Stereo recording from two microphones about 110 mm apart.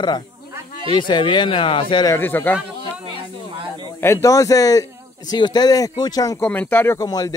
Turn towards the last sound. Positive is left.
turn(degrees=35)  # may be behind; listen again after turning